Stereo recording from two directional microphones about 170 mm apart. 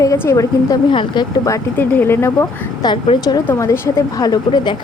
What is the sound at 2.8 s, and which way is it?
A woman's voice, 25° left (ahead or behind).